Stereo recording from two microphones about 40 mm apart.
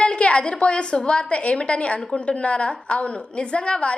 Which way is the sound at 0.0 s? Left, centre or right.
Left.